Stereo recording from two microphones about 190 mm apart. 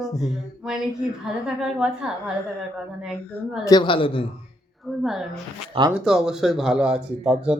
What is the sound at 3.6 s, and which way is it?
Speech, 25° left (ahead or behind).